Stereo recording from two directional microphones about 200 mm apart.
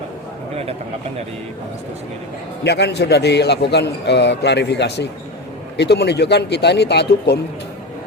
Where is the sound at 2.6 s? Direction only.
55° left (ahead or behind).